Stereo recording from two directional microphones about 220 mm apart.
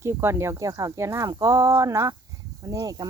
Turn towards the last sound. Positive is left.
turn(degrees=-15)  # may be behind; listen again after turning